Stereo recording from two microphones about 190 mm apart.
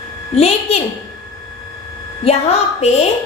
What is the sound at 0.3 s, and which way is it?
Speech, 30° left (ahead or behind).